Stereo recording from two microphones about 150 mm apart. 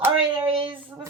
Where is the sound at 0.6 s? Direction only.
35° right (ahead or behind).